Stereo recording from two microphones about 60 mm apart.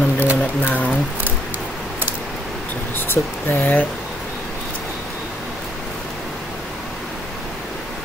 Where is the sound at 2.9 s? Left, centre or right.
Left.